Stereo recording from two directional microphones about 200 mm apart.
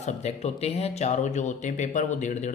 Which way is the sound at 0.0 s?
35° left (ahead or behind).